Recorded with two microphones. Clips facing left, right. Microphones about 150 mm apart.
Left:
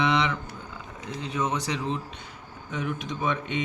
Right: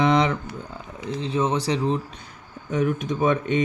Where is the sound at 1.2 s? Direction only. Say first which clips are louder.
Right 5 dB; 30° right (ahead or behind).